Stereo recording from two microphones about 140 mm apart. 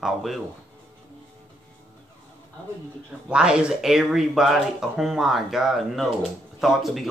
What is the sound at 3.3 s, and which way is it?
Speech, 5° right (ahead or behind).